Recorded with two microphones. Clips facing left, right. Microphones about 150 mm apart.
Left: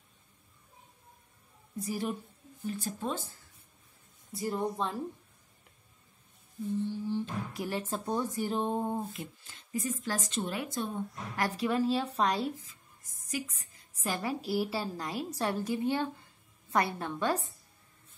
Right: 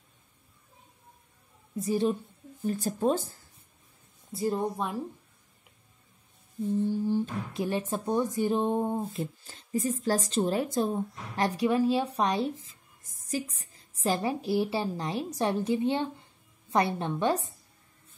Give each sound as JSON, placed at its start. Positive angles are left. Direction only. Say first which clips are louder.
{"t": 1.8, "sound": "a woman's voice", "louder": "right 7 dB", "side_deg": -25}
{"t": 2.6, "sound": "speech", "louder": "right 8 dB", "side_deg": -45}
{"t": 4.3, "sound": "a woman's voice", "louder": "right 4 dB", "side_deg": -25}
{"t": 7.5, "sound": "speech", "louder": "right 6 dB", "side_deg": -20}
{"t": 9.1, "sound": "speech", "louder": "right 8 dB", "side_deg": -35}
{"t": 11.4, "sound": "speech", "louder": "right 4 dB", "side_deg": -15}
{"t": 13.3, "sound": "a woman's voice", "louder": "right 4 dB", "side_deg": -30}